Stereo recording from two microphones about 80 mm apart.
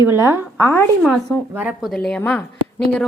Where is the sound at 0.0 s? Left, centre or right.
Right.